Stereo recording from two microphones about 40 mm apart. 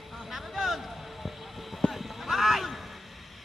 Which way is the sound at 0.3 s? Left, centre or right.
Centre.